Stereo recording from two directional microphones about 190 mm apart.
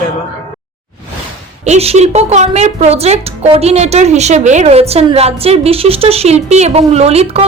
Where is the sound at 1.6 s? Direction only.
35° right (ahead or behind).